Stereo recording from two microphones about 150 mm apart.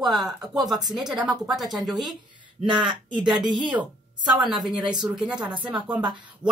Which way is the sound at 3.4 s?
30° right (ahead or behind).